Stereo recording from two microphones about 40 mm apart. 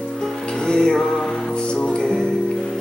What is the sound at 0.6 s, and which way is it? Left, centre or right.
Music, centre.